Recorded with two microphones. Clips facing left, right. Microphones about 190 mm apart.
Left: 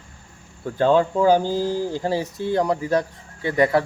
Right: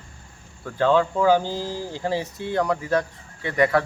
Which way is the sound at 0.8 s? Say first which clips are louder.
Left 2 dB; 35° left (ahead or behind).